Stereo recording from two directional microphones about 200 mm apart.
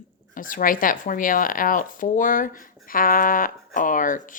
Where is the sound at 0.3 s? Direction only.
45° left (ahead or behind).